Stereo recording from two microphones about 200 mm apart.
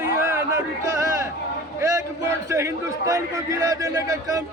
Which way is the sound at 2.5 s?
15° right (ahead or behind).